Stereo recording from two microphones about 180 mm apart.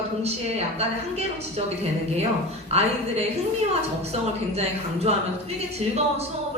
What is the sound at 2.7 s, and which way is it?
Speech, 35° right (ahead or behind).